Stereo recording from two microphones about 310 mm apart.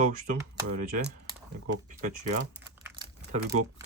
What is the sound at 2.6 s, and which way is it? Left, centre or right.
Crumpling, centre.